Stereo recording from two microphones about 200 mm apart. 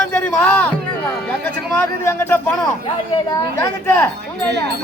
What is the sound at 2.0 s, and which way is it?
Speech, 10° left (ahead or behind).